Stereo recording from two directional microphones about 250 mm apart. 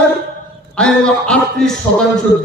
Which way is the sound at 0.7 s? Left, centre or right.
Centre.